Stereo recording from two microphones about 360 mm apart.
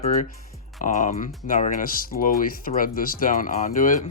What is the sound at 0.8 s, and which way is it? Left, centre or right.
Speech, left.